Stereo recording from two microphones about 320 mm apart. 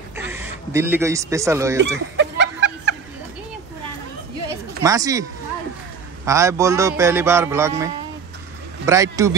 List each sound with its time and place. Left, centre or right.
0.1 s speech: centre
1.8 s a sound: right
4.8 s a man's voice: centre
6.2 s a man's voice: centre